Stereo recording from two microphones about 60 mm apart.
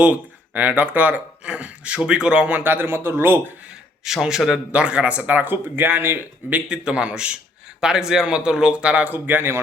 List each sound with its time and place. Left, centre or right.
0.0 s speech: right
2.5 s speech: right
4.0 s speech: centre; by 6.6 s right
6.7 s speech: centre; by 9.6 s right